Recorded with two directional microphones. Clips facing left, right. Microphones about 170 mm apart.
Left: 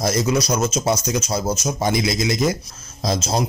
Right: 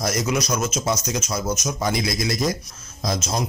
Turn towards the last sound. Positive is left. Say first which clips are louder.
# left 4 dB
turn(degrees=30)  # may be behind; listen again after turning